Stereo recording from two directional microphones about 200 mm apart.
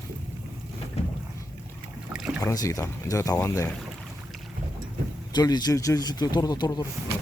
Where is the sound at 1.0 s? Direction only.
30° left (ahead or behind).